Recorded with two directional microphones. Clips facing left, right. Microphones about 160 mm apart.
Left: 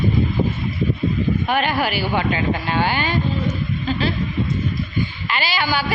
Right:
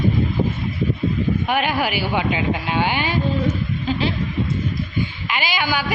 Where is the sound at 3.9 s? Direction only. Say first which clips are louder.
Right 1 dB; 15° right (ahead or behind).